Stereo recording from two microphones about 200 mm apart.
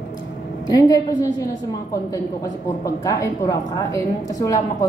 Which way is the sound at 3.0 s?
15° left (ahead or behind).